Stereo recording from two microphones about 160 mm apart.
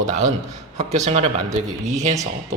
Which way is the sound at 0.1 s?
45° right (ahead or behind).